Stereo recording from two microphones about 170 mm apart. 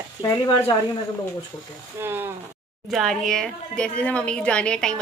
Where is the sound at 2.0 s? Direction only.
15° right (ahead or behind).